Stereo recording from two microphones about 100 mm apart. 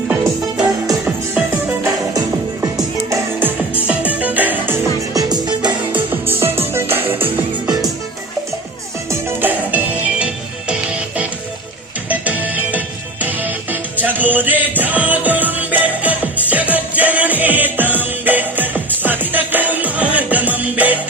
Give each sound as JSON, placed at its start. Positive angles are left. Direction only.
{"t": 0.1, "sound": "music", "side_deg": -10}
{"t": 2.1, "sound": "music", "side_deg": -35}
{"t": 3.4, "sound": "music", "side_deg": -15}
{"t": 5.1, "sound": "music", "side_deg": -40}
{"t": 5.9, "sound": "music", "side_deg": -20}
{"t": 9.4, "sound": "music", "side_deg": -15}
{"t": 12.0, "sound": "music", "side_deg": -15}
{"t": 13.9, "sound": "music", "side_deg": -15}